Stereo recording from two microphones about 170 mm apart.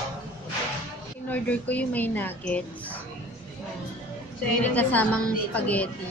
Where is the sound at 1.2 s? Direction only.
10° left (ahead or behind).